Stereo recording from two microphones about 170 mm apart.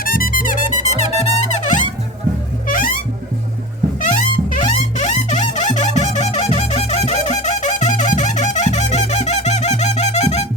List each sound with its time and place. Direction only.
0.0 s music: 55° left (ahead or behind)
2.6 s music: 55° left (ahead or behind)
4.0 s music: 50° left (ahead or behind)